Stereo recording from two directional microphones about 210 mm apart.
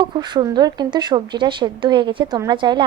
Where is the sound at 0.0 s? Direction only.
20° right (ahead or behind).